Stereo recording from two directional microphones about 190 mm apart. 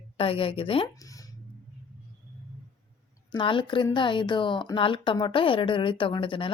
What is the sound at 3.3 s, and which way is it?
Speech, 25° left (ahead or behind).